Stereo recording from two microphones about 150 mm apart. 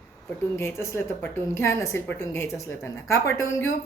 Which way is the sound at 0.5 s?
15° left (ahead or behind).